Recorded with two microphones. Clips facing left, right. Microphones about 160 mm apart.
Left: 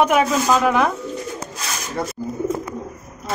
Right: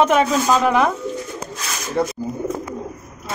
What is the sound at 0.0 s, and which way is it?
Speech, 5° left (ahead or behind).